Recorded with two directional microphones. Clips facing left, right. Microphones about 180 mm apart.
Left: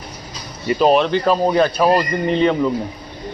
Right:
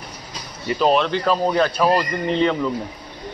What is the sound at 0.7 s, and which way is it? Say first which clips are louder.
Speech: left 4 dB; 15° left (ahead or behind).